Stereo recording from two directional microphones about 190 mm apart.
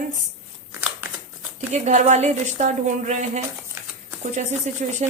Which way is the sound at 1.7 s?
35° right (ahead or behind).